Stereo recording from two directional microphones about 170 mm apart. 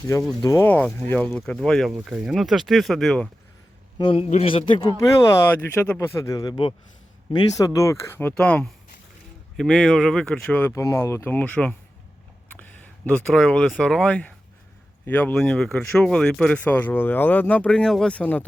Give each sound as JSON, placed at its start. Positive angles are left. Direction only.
{"t": 0.4, "sound": "speech", "side_deg": 15}
{"t": 3.9, "sound": "a man's voice", "side_deg": 30}